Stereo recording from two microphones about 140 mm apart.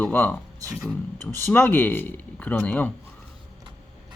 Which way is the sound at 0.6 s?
25° right (ahead or behind).